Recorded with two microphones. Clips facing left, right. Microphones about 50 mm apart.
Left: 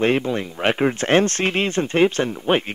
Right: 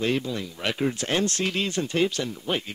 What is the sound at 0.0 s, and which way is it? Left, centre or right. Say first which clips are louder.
Speech: left 7 dB; left.